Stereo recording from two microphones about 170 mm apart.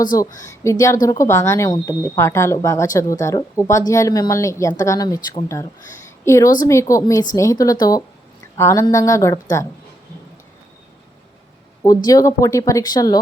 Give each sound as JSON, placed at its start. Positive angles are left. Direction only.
{"t": 0.3, "sound": "a woman's voice", "side_deg": 15}
{"t": 12.0, "sound": "speech", "side_deg": 20}